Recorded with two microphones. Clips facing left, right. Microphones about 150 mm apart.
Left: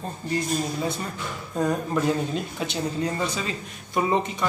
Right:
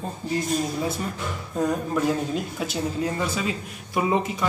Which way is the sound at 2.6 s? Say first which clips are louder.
Right 1 dB; 5° right (ahead or behind).